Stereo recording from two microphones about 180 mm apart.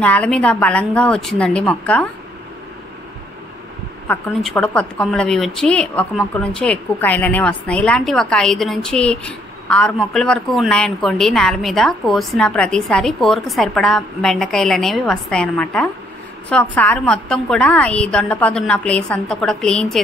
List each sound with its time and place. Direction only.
0.0 s a woman's voice: 5° left (ahead or behind)
4.1 s a woman's voice: 5° left (ahead or behind)